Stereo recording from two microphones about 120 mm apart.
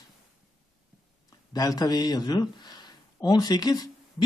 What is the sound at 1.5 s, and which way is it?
A man's voice, 30° left (ahead or behind).